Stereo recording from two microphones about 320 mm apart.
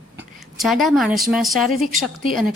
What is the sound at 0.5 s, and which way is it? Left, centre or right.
A woman's voice, centre.